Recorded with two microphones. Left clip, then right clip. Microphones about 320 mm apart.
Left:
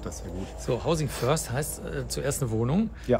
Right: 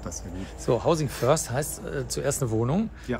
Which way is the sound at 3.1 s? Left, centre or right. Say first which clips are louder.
Left 9 dB; left.